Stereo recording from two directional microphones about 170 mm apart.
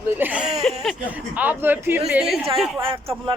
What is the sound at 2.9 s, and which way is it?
Speech, 30° right (ahead or behind).